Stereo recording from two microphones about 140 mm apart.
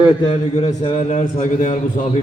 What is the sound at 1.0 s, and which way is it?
Speech, 60° left (ahead or behind).